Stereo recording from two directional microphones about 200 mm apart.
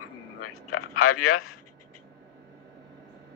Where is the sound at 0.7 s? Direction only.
90° left.